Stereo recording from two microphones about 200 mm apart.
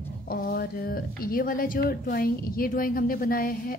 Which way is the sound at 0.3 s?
50° left (ahead or behind).